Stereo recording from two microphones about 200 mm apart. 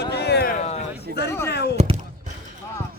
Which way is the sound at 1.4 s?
55° left (ahead or behind).